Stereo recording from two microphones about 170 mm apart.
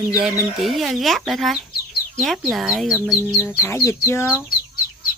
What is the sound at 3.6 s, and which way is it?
Speech, 15° left (ahead or behind).